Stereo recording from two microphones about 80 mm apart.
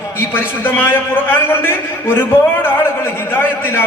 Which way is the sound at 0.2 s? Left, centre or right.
Left.